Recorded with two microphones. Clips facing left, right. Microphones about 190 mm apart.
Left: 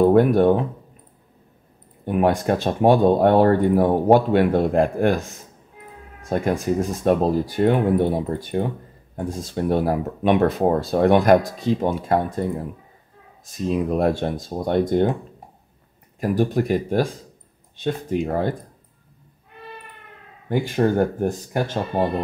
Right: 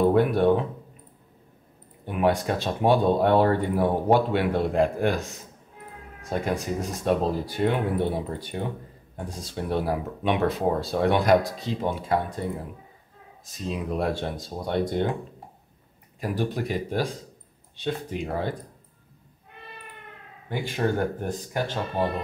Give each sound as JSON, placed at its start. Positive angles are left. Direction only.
{"t": 0.0, "sound": "speech", "side_deg": 45}
{"t": 2.0, "sound": "speech", "side_deg": 45}
{"t": 6.3, "sound": "speech", "side_deg": 50}
{"t": 13.7, "sound": "speech", "side_deg": 50}
{"t": 16.2, "sound": "speech", "side_deg": 45}
{"t": 20.4, "sound": "speech", "side_deg": 45}